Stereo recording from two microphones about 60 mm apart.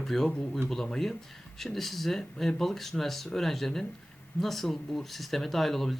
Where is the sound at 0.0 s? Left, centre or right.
Centre.